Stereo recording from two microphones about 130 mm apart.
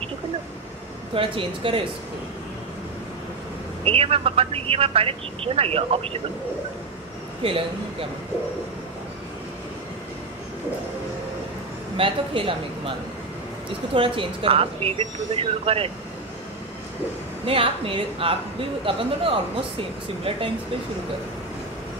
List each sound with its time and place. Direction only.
1.1 s speech: 40° right (ahead or behind)
3.8 s speech: 45° right (ahead or behind)
12.0 s speech: 45° right (ahead or behind)
13.9 s speech: 40° right (ahead or behind)
17.5 s speech: 45° right (ahead or behind)